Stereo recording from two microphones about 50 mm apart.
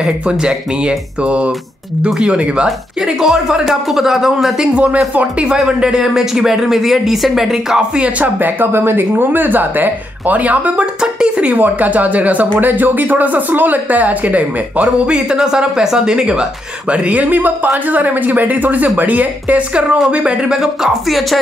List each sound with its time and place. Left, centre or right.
0.0 s speech: centre
2.0 s speech: centre
2.3 s speech: centre
3.2 s speech: centre
4.7 s speech: right; by 7.8 s centre
8.0 s speech: right
11.0 s speech: centre
11.5 s speech: right
15.1 s speech: centre
16.9 s speech: right
20.6 s speech: centre